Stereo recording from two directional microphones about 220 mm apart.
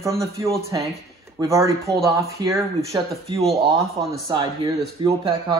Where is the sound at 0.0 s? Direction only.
15° right (ahead or behind).